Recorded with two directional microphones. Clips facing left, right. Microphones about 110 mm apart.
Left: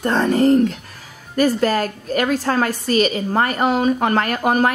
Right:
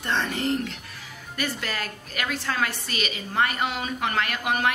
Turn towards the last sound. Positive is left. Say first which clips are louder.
# left 8 dB
turn(degrees=40)  # may be behind; listen again after turning